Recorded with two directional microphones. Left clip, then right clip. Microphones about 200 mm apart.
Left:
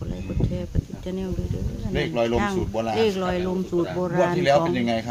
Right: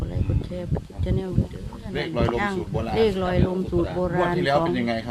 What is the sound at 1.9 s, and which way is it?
Speech, 35° left (ahead or behind).